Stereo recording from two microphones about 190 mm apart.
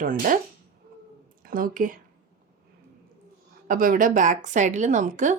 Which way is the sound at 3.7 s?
45° right (ahead or behind).